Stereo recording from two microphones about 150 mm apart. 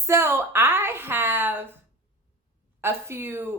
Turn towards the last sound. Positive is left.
turn(degrees=-15)  # may be behind; listen again after turning